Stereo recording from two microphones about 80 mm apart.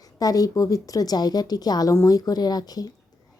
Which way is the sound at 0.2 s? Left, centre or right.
Left.